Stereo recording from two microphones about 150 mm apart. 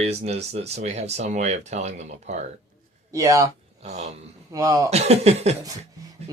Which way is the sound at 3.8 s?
50° right (ahead or behind).